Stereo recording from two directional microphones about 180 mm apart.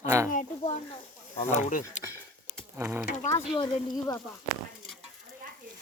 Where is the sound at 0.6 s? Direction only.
35° left (ahead or behind).